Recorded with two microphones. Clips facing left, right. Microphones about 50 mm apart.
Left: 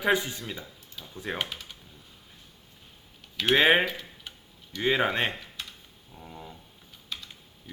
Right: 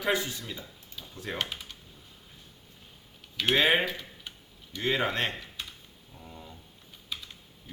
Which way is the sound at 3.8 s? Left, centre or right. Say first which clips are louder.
Left 2 dB; centre.